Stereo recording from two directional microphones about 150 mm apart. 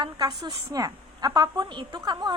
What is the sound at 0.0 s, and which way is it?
A woman's voice, 30° right (ahead or behind).